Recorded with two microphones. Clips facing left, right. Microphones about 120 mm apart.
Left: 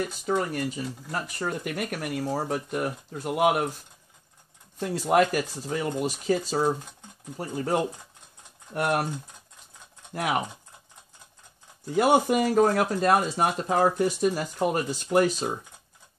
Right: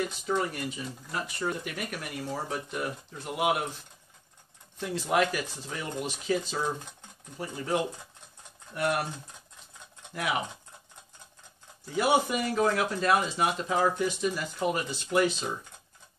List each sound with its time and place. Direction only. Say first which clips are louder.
0.1 s speech: left 3 dB; 45° left (ahead or behind)
4.7 s speech: left 5 dB; 45° left (ahead or behind)
10.1 s speech: left 4 dB; 50° left (ahead or behind)
11.9 s speech: left 5 dB; 50° left (ahead or behind)